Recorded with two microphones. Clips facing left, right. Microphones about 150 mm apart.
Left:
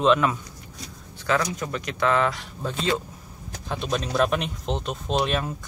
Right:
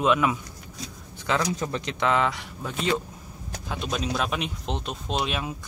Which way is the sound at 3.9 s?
5° right (ahead or behind).